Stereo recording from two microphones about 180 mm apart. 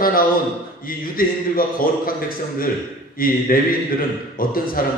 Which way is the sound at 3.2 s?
55° left (ahead or behind).